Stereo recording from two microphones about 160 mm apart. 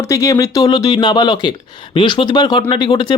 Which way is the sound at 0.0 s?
20° left (ahead or behind).